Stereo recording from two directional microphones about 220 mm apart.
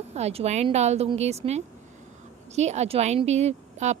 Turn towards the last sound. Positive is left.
turn(degrees=-30)  # may be behind; listen again after turning